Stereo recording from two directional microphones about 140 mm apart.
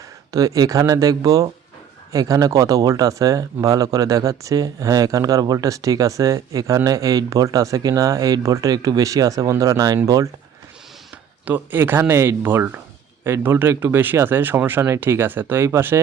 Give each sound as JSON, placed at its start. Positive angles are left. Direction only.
{"t": 0.3, "sound": "speech", "side_deg": -25}
{"t": 11.4, "sound": "speech", "side_deg": -15}